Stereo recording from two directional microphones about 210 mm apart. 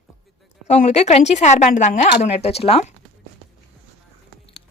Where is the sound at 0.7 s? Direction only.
30° left (ahead or behind).